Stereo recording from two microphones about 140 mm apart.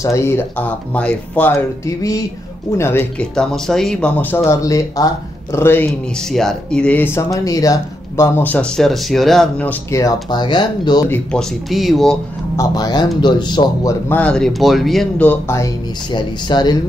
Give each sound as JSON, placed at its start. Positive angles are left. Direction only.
{"t": 0.0, "sound": "speech", "side_deg": 20}
{"t": 1.9, "sound": "speech", "side_deg": 25}
{"t": 3.2, "sound": "speech", "side_deg": 5}
{"t": 5.9, "sound": "speech", "side_deg": 5}
{"t": 8.4, "sound": "speech", "side_deg": 10}
{"t": 10.3, "sound": "speech", "side_deg": 35}
{"t": 11.3, "sound": "speech", "side_deg": 0}
{"t": 12.5, "sound": "speech", "side_deg": 30}
{"t": 14.0, "sound": "speech", "side_deg": 10}
{"t": 15.2, "sound": "speech", "side_deg": 20}
{"t": 16.1, "sound": "speech", "side_deg": 30}